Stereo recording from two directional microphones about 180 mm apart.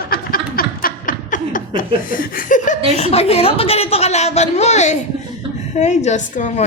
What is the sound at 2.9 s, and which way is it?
A woman's voice, 35° left (ahead or behind).